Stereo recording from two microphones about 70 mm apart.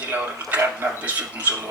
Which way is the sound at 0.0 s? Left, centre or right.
Right.